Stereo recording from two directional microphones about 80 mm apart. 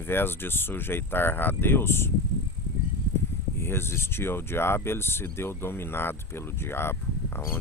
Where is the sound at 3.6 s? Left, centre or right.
Left.